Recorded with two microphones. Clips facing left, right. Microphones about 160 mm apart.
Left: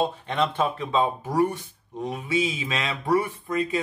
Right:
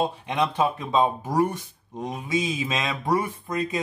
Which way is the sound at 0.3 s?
10° right (ahead or behind).